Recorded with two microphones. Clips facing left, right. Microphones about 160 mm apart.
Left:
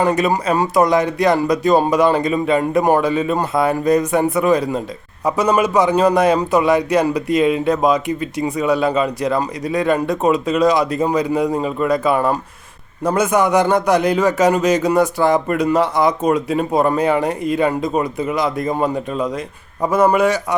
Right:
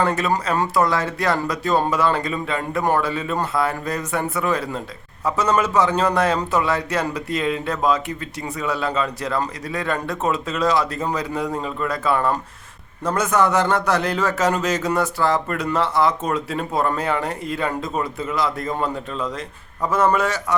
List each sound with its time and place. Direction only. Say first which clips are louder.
0.0 s a man's voice: left 4 dB; 15° left (ahead or behind)